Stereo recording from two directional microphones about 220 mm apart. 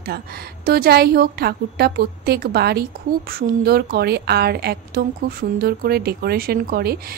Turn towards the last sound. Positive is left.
turn(degrees=-45)  # may be behind; listen again after turning